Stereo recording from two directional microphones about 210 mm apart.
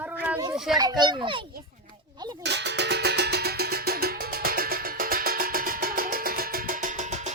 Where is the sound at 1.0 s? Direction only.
20° right (ahead or behind).